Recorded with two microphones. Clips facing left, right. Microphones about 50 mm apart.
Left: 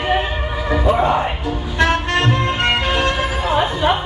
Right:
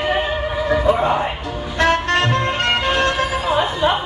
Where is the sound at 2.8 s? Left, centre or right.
Centre.